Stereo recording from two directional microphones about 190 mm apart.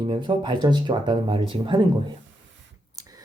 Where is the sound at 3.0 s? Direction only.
20° right (ahead or behind).